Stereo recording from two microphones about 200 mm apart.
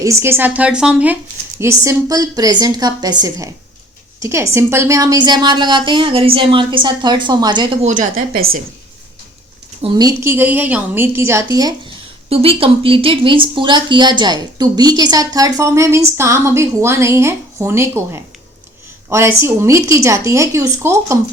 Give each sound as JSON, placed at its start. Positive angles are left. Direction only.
{"t": 0.0, "sound": "a woman's voice", "side_deg": -15}
{"t": 7.9, "sound": "a woman's voice", "side_deg": -40}
{"t": 9.8, "sound": "speech", "side_deg": -20}
{"t": 12.3, "sound": "a woman's voice", "side_deg": -30}